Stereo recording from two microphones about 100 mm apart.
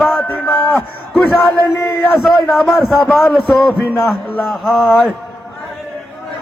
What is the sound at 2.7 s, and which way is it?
Speech, centre (ahead or behind).